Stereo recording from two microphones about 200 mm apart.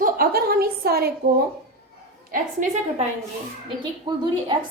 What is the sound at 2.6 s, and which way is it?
Speech, 40° right (ahead or behind).